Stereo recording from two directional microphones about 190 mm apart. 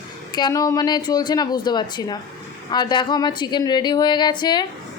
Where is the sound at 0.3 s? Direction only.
20° left (ahead or behind).